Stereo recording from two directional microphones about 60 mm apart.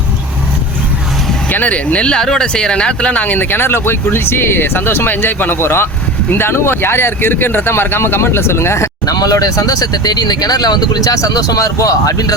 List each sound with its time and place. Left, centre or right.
1.5 s speech: left
9.0 s speech: left